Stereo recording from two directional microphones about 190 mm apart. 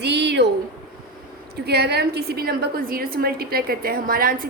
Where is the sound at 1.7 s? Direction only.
60° right (ahead or behind).